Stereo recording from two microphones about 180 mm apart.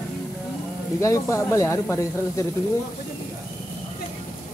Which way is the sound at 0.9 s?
15° left (ahead or behind).